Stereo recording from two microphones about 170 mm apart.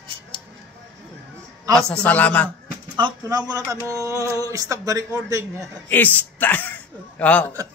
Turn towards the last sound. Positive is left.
turn(degrees=10)  # may be behind; listen again after turning